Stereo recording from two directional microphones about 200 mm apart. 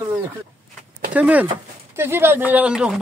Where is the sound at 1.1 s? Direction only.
5° right (ahead or behind).